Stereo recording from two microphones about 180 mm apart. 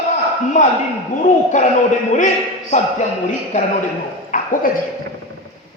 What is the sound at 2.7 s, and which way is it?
Speech, 40° left (ahead or behind).